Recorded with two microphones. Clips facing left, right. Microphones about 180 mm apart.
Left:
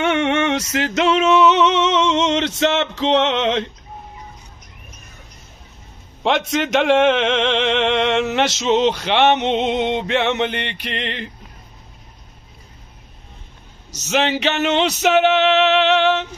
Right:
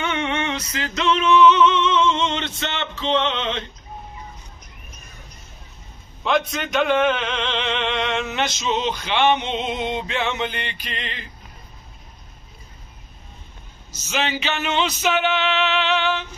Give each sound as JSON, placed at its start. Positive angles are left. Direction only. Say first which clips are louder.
{"t": 0.0, "sound": "music", "louder": "left 7 dB", "side_deg": 80}
{"t": 6.2, "sound": "speech", "louder": "left 3 dB", "side_deg": 90}
{"t": 13.9, "sound": "speech", "louder": "left 6 dB", "side_deg": 75}